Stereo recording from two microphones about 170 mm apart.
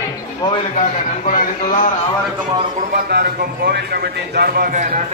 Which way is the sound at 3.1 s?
70° right (ahead or behind).